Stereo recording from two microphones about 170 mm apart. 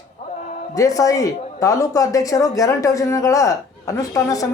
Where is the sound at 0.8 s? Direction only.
20° left (ahead or behind).